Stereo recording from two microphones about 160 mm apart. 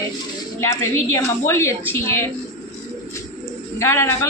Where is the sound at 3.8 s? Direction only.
15° left (ahead or behind).